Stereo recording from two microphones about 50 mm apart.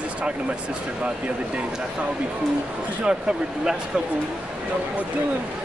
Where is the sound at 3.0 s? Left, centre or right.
Centre.